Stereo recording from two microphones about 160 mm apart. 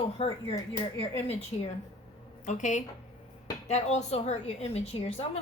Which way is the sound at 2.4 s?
50° left (ahead or behind).